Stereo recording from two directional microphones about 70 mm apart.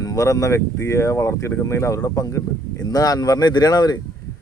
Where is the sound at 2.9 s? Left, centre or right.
Left.